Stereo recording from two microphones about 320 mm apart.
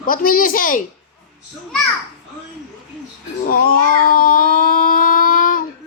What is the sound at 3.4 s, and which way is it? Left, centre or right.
Child singing, left.